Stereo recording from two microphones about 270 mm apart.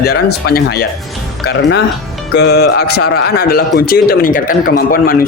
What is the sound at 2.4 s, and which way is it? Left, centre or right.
A man's voice, left.